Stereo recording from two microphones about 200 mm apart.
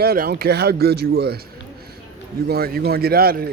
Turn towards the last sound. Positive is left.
turn(degrees=-50)  # may be behind; listen again after turning